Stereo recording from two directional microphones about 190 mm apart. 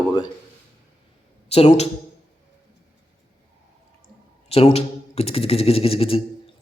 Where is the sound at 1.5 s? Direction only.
35° left (ahead or behind).